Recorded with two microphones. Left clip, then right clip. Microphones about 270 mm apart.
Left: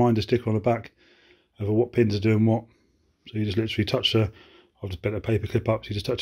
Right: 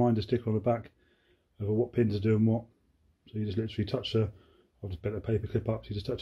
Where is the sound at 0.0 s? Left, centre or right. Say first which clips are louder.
Left 6 dB; left.